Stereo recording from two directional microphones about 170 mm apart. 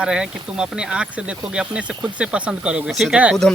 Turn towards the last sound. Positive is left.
turn(degrees=-5)  # may be behind; listen again after turning